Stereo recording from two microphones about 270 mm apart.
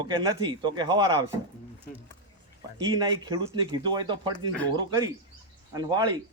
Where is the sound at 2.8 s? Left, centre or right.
Centre.